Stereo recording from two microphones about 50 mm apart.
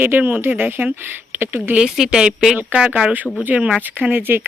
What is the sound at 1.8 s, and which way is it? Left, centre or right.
Speech, centre.